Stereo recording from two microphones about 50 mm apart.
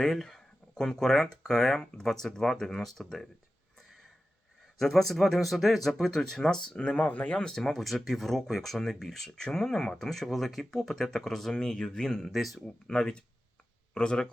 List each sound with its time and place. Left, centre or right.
0.0 s speech: centre
4.8 s speech: centre; by 7.3 s left
7.3 s speech: centre
12.9 s speech: centre